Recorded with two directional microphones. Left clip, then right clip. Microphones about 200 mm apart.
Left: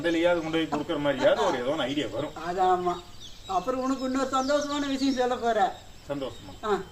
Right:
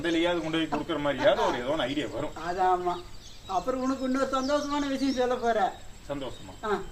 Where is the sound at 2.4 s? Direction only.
Centre (ahead or behind).